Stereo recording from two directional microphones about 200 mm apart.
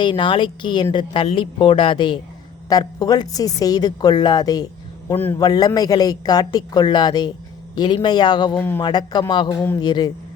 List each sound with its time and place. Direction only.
0.0 s a woman's voice: 25° left (ahead or behind)
5.1 s a man's voice: 10° left (ahead or behind)
5.4 s a woman's voice: 20° left (ahead or behind)
8.5 s a man's voice: 10° left (ahead or behind)
8.8 s a woman's voice: 20° left (ahead or behind)